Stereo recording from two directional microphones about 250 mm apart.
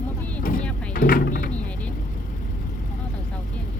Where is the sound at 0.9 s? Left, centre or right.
Left.